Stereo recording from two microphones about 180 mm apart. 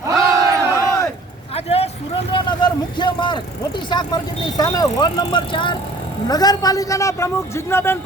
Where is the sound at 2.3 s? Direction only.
25° left (ahead or behind).